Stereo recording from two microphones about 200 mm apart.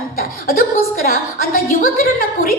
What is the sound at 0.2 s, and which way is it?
Chuckle, 45° left (ahead or behind).